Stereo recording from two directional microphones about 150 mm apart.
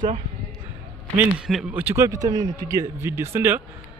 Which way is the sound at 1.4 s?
5° right (ahead or behind).